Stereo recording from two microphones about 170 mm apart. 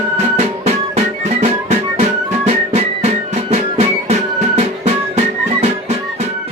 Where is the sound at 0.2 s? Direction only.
40° right (ahead or behind).